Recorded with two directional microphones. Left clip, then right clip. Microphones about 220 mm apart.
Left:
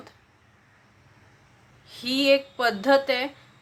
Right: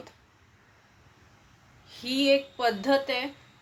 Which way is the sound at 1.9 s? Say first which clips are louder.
Left 3 dB; 15° left (ahead or behind).